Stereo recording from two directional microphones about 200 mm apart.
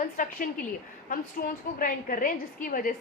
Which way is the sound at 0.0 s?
45° left (ahead or behind).